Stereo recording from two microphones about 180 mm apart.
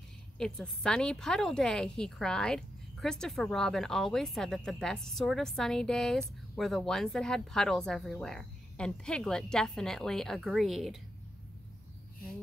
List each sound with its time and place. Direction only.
0.4 s a woman's voice: 5° left (ahead or behind)